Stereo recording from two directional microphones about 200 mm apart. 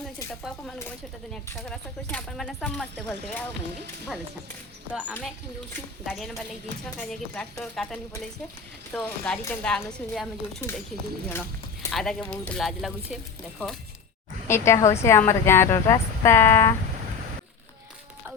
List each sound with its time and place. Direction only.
0.8 s speech: 5° left (ahead or behind)
6.1 s speech: centre (ahead or behind)
11.3 s clip-clop: 10° left (ahead or behind)
11.9 s speech: centre (ahead or behind)
14.4 s speech: 15° left (ahead or behind)